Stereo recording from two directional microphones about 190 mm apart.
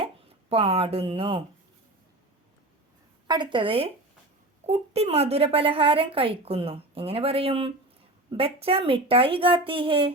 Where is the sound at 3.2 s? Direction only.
25° right (ahead or behind).